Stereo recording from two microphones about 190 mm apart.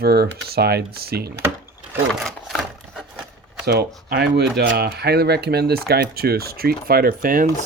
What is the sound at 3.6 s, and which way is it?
Speech, 55° right (ahead or behind).